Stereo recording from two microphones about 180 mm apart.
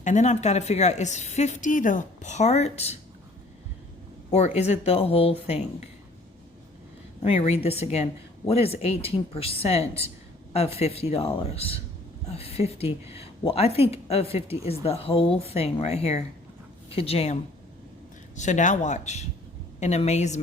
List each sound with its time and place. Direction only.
0.0 s a woman's voice: 40° left (ahead or behind)
4.3 s a woman's voice: 40° left (ahead or behind)
7.3 s a woman's voice: 35° left (ahead or behind)
18.3 s a woman's voice: 40° left (ahead or behind)